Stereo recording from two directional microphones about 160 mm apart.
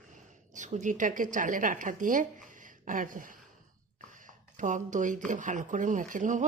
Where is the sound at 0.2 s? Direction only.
50° right (ahead or behind).